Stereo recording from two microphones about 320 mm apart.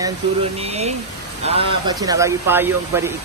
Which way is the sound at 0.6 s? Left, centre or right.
Centre.